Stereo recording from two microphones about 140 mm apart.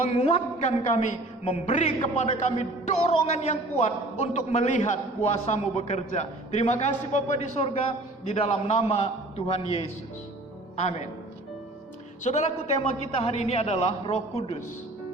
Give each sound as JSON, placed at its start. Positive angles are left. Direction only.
{"t": 0.2, "sound": "a man's voice", "side_deg": 50}
{"t": 12.2, "sound": "a man's voice", "side_deg": 55}